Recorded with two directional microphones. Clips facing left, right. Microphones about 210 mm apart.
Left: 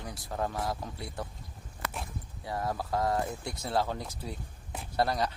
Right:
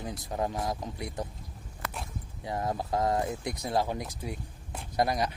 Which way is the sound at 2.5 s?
20° right (ahead or behind).